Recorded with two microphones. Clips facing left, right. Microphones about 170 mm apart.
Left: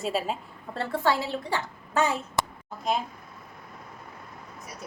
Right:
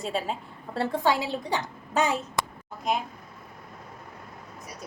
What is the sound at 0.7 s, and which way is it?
A woman's voice, 15° right (ahead or behind).